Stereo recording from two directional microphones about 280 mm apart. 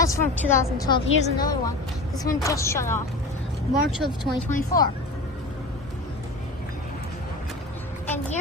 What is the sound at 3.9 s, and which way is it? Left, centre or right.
Speech, centre.